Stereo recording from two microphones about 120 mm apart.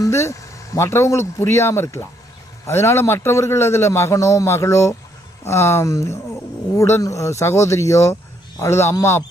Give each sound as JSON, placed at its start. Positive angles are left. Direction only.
{"t": 0.0, "sound": "a man's voice", "side_deg": 25}